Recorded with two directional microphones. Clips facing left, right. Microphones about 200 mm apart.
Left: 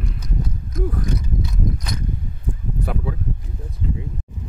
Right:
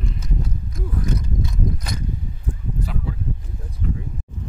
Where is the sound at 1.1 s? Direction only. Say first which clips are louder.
Even; centre (ahead or behind).